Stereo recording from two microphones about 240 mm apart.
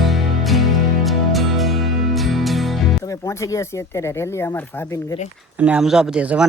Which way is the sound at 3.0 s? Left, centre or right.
Centre.